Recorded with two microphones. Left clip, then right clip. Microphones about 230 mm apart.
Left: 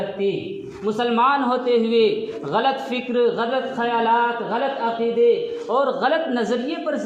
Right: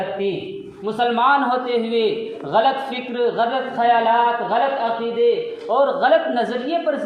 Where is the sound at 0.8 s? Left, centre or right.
Left.